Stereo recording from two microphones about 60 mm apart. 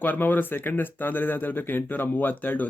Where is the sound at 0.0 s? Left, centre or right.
Left.